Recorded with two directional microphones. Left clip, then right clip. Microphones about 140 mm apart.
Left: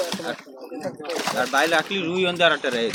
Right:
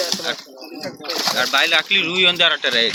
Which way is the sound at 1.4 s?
65° left (ahead or behind).